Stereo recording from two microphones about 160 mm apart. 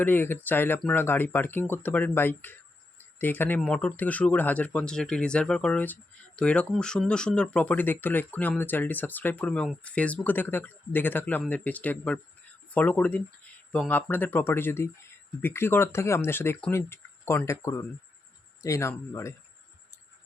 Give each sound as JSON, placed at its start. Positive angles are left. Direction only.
{"t": 0.0, "sound": "speech", "side_deg": 10}